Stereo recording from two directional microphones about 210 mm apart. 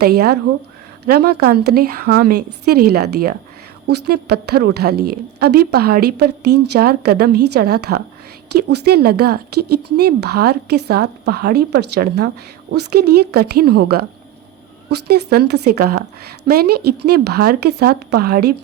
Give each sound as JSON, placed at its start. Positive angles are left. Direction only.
{"t": 0.0, "sound": "a woman's voice", "side_deg": -50}